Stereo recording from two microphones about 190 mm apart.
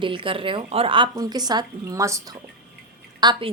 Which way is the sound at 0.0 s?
25° right (ahead or behind).